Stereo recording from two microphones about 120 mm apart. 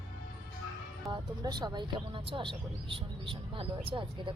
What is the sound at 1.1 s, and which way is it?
Speech, 35° right (ahead or behind).